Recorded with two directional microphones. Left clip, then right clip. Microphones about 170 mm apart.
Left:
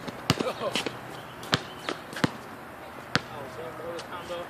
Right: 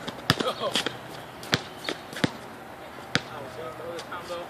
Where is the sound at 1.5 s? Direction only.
20° right (ahead or behind).